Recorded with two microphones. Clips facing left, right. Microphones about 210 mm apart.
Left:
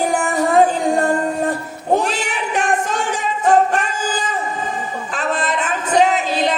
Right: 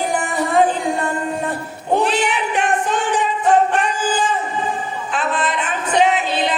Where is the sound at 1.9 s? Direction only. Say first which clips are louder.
Right 1 dB; 40° left (ahead or behind).